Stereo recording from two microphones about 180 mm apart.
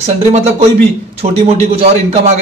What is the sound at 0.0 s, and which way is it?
Speech, 35° right (ahead or behind).